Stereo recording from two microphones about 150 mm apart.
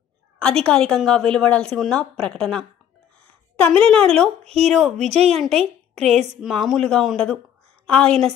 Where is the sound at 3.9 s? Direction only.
5° left (ahead or behind).